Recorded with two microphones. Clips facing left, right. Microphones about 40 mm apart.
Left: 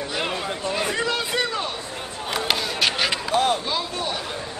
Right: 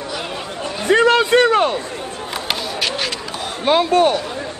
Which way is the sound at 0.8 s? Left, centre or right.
Right.